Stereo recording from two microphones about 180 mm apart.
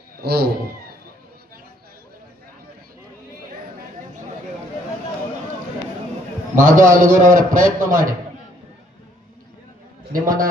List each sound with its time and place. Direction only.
0.2 s speech: 60° right (ahead or behind)
6.6 s a man's voice: 45° right (ahead or behind)
10.1 s a man's voice: 50° right (ahead or behind)